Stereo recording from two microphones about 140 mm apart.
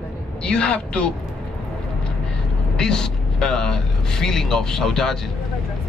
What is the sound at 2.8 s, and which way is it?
Vehicle, 5° left (ahead or behind).